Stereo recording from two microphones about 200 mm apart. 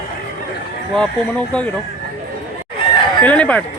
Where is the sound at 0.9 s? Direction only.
5° left (ahead or behind).